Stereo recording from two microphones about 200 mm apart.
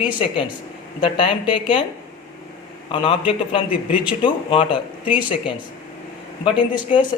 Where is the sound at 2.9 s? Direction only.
25° left (ahead or behind).